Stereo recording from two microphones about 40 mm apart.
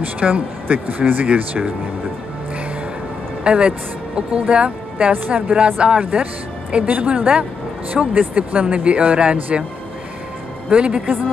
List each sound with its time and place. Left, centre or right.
0.2 s speech: right
3.4 s speech: right
8.1 s speech: right
10.7 s speech: right